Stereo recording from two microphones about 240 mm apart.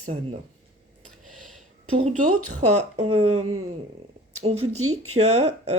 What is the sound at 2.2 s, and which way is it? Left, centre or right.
Speech, right.